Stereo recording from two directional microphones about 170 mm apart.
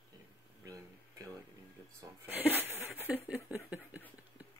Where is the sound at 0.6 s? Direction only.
20° right (ahead or behind).